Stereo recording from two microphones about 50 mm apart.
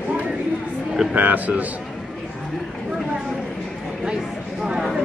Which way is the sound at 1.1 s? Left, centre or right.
Right.